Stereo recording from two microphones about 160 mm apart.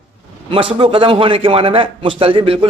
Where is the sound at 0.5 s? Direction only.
30° right (ahead or behind).